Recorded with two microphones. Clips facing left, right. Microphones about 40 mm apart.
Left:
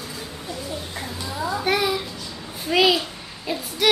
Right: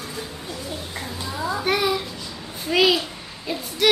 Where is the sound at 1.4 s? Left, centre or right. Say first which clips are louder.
Even; centre.